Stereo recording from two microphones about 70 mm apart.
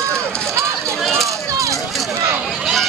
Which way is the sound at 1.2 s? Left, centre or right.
Right.